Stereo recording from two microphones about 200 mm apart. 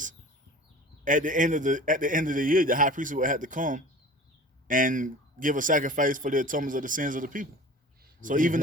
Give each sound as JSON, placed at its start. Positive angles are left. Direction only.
{"t": 1.0, "sound": "a man's voice", "side_deg": -40}